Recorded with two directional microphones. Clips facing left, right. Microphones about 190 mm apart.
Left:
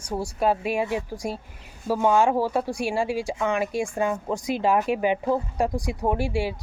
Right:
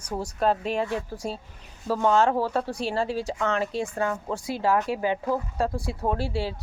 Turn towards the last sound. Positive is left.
turn(degrees=15)  # may be behind; listen again after turning